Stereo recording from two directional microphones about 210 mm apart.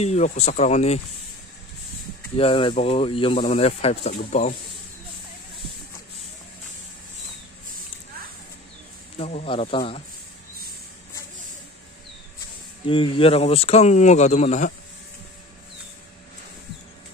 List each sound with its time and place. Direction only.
0.0 s speech: 30° left (ahead or behind)
2.3 s speech: 25° left (ahead or behind)
9.2 s speech: 30° left (ahead or behind)
12.8 s speech: 25° left (ahead or behind)